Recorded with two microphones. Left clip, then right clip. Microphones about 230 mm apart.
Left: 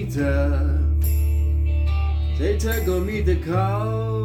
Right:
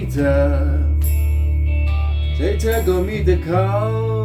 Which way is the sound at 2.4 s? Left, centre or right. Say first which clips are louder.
Right 5 dB; centre.